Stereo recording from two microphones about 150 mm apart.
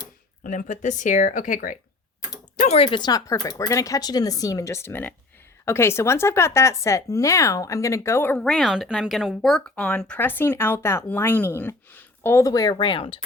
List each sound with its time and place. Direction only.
0.4 s speech: 60° left (ahead or behind)
2.6 s speech: 45° left (ahead or behind)
3.0 s speech: 25° left (ahead or behind)
8.4 s speech: centre (ahead or behind); by 13.1 s 35° left (ahead or behind)